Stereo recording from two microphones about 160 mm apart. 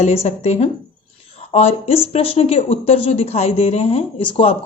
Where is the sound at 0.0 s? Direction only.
40° left (ahead or behind).